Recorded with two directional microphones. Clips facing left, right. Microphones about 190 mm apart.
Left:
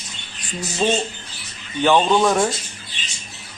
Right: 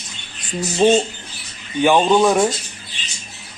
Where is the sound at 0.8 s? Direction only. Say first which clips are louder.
Right 6 dB; 20° right (ahead or behind).